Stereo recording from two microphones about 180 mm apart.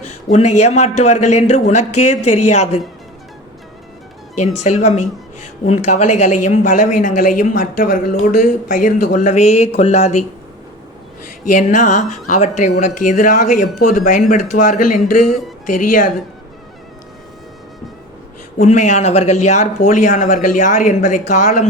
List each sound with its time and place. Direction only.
0.3 s a man's voice: 40° left (ahead or behind)
4.6 s a woman's voice: 40° left (ahead or behind)
11.5 s a woman's voice: 45° left (ahead or behind)
18.6 s a woman's voice: 40° left (ahead or behind)